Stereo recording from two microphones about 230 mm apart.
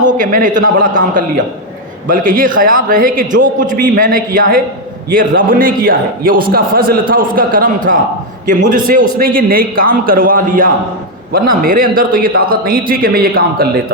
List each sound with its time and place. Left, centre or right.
0.0 s a man's voice: right